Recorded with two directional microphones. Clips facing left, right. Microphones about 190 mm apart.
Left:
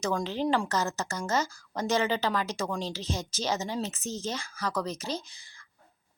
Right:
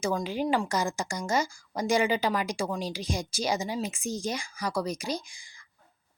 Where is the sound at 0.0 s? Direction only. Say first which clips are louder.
Even; 5° right (ahead or behind).